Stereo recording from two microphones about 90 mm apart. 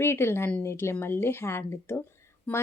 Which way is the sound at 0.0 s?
25° left (ahead or behind).